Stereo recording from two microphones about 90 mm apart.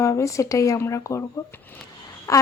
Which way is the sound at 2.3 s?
40° left (ahead or behind).